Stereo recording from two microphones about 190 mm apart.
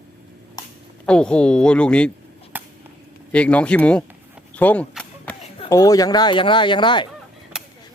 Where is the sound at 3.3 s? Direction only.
5° left (ahead or behind).